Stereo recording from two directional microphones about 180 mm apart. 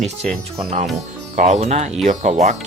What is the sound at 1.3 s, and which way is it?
Speech, 35° right (ahead or behind).